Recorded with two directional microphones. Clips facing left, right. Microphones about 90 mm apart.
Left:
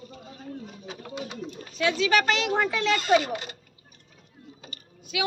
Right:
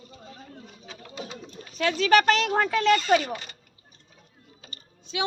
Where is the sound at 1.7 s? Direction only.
40° right (ahead or behind).